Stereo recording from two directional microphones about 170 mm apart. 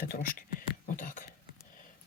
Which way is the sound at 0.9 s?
50° left (ahead or behind).